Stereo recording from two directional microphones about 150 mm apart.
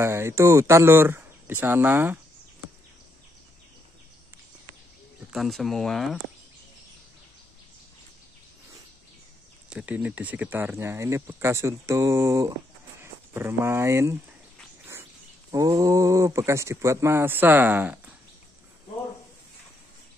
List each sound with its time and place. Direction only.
0.0 s speech: 20° right (ahead or behind)
5.3 s speech: centre (ahead or behind)
9.7 s speech: 5° right (ahead or behind)
15.5 s speech: 25° right (ahead or behind)